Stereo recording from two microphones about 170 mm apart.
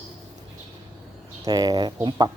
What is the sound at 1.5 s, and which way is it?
Speech, 20° right (ahead or behind).